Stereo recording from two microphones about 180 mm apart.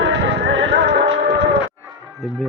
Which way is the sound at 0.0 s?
75° right (ahead or behind).